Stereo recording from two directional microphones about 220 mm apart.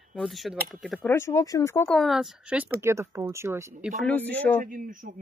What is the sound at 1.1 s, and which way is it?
Speech, 15° left (ahead or behind).